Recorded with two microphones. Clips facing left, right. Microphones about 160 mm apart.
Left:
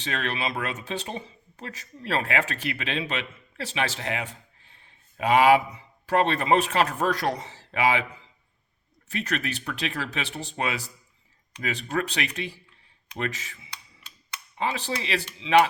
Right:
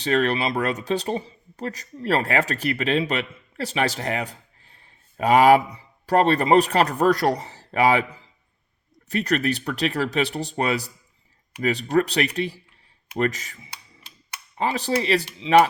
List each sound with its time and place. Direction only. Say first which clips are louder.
0.0 s speech: right 8 dB; 40° right (ahead or behind)
9.0 s speech: right 7 dB; 40° right (ahead or behind)
13.1 s typing: right 8 dB; 40° right (ahead or behind)
14.6 s speech: right 6 dB; 40° right (ahead or behind)